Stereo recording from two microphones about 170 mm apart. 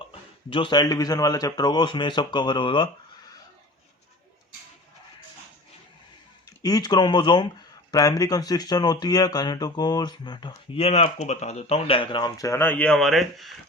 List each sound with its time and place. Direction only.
0.5 s speech: 30° left (ahead or behind)
6.6 s speech: 20° left (ahead or behind); by 13.5 s centre (ahead or behind)